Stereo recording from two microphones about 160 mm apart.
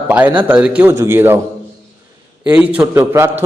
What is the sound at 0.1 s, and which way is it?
A man's voice, 10° right (ahead or behind).